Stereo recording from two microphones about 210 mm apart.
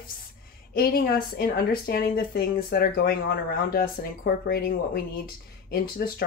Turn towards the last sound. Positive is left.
turn(degrees=45)  # may be behind; listen again after turning